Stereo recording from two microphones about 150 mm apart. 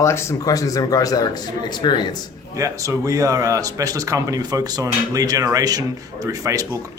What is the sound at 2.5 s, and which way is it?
Speech, 20° right (ahead or behind).